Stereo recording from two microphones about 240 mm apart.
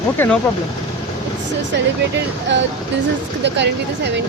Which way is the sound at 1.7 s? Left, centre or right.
Right.